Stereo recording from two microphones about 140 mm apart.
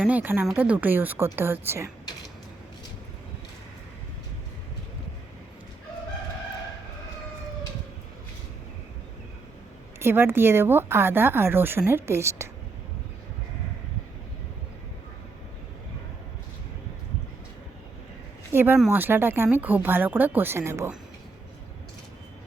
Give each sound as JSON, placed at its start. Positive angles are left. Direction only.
{"t": 0.1, "sound": "a woman's voice", "side_deg": -10}
{"t": 10.0, "sound": "a woman's voice", "side_deg": -15}
{"t": 18.5, "sound": "a woman's voice", "side_deg": -15}